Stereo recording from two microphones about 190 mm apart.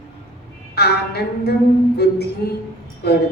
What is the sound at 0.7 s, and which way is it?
Speech, 55° left (ahead or behind).